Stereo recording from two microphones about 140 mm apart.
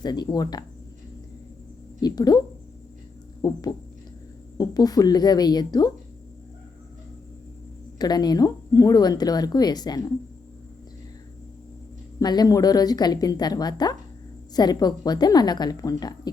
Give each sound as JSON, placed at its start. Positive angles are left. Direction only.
{"t": 0.0, "sound": "speech", "side_deg": 30}
{"t": 2.0, "sound": "speech", "side_deg": 30}
{"t": 3.4, "sound": "speech", "side_deg": 25}
{"t": 7.9, "sound": "speech", "side_deg": 30}
{"t": 12.2, "sound": "speech", "side_deg": 30}